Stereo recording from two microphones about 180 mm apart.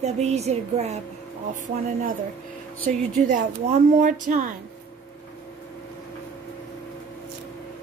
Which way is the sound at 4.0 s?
45° right (ahead or behind).